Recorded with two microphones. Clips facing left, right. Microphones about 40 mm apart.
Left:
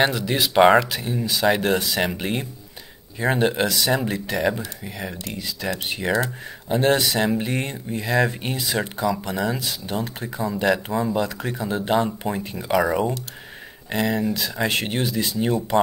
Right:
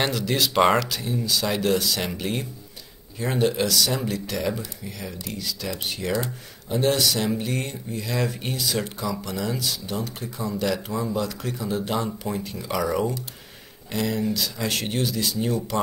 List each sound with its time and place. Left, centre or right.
0.0 s speech: left